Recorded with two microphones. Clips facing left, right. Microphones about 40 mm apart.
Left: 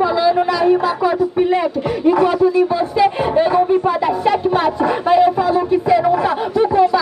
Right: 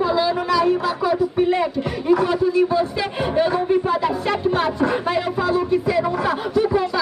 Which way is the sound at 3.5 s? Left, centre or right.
Centre.